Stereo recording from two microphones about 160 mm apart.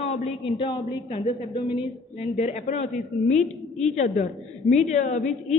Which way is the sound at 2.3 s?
45° left (ahead or behind).